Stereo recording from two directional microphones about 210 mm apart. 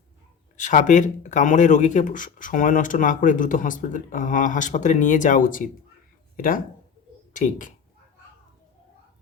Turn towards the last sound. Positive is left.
turn(degrees=40)  # may be behind; listen again after turning